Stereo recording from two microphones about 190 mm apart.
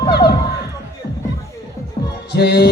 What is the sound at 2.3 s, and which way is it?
Music, 60° left (ahead or behind).